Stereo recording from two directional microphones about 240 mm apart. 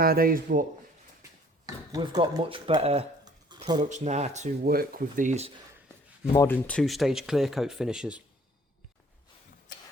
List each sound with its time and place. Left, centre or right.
0.0 s a man's voice: right
1.6 s speech: centre
3.8 s speech: right
6.3 s speech: centre